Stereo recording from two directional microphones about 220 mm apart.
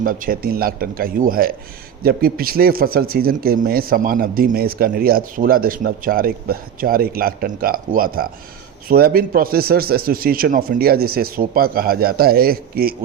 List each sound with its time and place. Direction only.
0.0 s a man's voice: 40° right (ahead or behind)